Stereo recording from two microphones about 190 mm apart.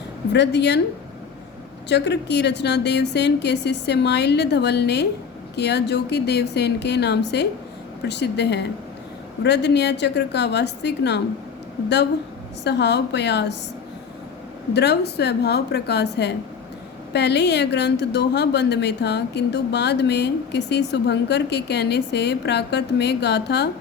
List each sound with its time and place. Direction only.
0.3 s a woman's voice: 65° left (ahead or behind)
1.9 s a woman's voice: 65° left (ahead or behind)
12.6 s a woman's voice: 65° left (ahead or behind)
14.7 s a woman's voice: 60° left (ahead or behind)